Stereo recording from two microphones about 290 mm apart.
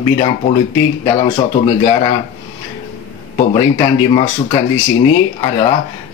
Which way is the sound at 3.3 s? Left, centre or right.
Centre.